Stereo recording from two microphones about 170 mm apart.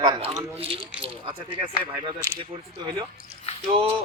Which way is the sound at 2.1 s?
15° right (ahead or behind).